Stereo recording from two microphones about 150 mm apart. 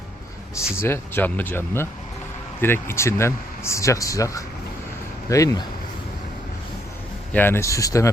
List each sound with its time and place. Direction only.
0.8 s speech: 15° left (ahead or behind)
7.3 s speech: 15° left (ahead or behind)